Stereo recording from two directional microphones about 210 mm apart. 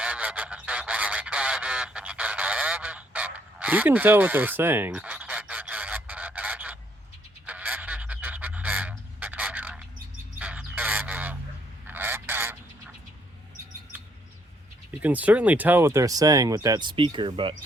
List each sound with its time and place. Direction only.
0.0 s honk: 5° right (ahead or behind)
7.4 s goose: 5° right (ahead or behind)
15.0 s speech: 5° right (ahead or behind); by 17.5 s 25° right (ahead or behind)